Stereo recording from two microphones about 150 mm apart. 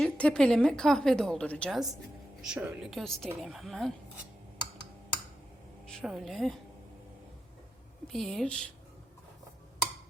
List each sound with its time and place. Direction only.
0.0 s a woman's voice: 5° left (ahead or behind)
2.4 s a woman's voice: 5° right (ahead or behind)
6.0 s a woman's voice: 5° right (ahead or behind)
8.0 s a woman's voice: centre (ahead or behind)